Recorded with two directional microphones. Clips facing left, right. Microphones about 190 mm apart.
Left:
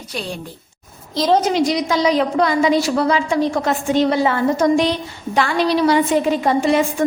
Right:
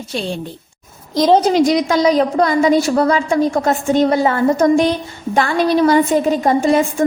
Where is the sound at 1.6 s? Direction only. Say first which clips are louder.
Right 4 dB; 50° right (ahead or behind).